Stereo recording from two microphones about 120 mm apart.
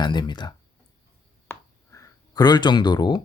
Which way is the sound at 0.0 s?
40° left (ahead or behind).